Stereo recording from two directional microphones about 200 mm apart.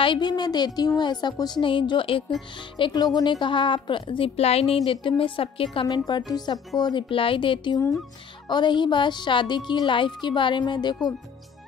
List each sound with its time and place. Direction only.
0.0 s a woman's voice: 25° left (ahead or behind)